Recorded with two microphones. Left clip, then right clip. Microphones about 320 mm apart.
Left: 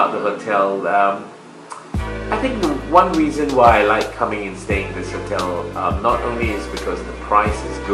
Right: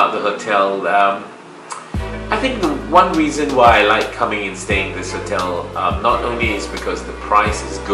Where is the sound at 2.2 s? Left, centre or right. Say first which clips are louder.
Right 2 dB; centre.